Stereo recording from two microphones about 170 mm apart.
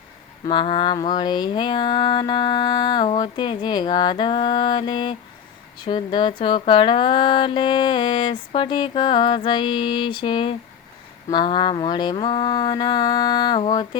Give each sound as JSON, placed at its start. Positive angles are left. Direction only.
{"t": 0.4, "sound": "speech", "side_deg": 30}